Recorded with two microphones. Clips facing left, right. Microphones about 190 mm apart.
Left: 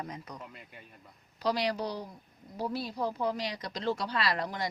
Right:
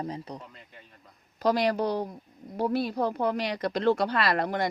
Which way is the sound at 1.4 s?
50° right (ahead or behind).